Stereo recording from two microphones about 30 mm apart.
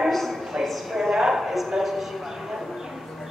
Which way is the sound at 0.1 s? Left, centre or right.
Centre.